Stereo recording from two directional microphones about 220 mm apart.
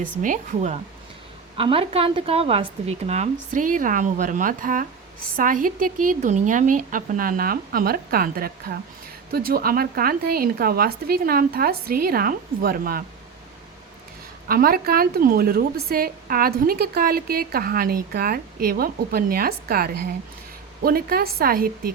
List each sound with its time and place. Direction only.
0.0 s speech: 35° right (ahead or behind)
1.5 s speech: 25° right (ahead or behind); by 13.1 s 40° right (ahead or behind)
14.4 s a woman's voice: 40° right (ahead or behind)